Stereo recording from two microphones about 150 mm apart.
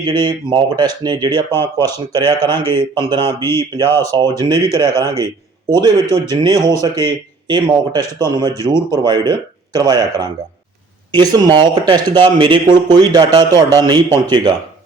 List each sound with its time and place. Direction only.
0.0 s speech: 30° right (ahead or behind)
1.3 s speech: 15° left (ahead or behind)
2.5 s speech: 30° right (ahead or behind)
3.4 s speech: 15° left (ahead or behind)
4.1 s speech: 30° right (ahead or behind)